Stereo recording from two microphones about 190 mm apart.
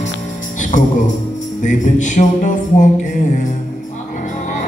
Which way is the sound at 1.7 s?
40° left (ahead or behind).